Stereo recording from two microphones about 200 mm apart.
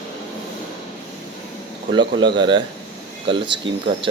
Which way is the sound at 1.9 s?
25° right (ahead or behind).